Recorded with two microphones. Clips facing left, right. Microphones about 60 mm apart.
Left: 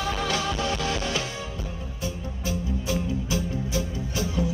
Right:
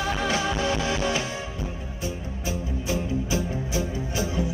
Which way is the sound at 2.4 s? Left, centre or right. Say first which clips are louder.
Left 1 dB; right.